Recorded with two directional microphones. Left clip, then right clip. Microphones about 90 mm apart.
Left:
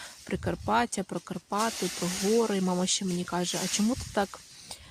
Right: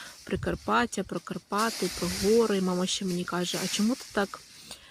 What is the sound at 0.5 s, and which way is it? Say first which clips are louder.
Speech: even; 25° left (ahead or behind).